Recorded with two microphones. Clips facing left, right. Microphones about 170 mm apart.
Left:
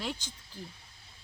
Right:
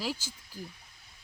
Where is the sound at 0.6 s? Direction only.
25° left (ahead or behind).